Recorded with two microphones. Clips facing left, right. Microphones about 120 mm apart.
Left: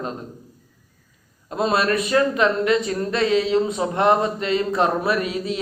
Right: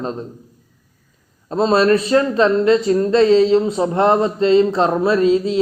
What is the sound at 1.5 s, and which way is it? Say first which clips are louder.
Speech: right 6 dB; 30° right (ahead or behind).